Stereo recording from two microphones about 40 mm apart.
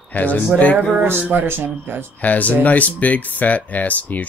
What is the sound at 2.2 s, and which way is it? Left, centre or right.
Speech, left.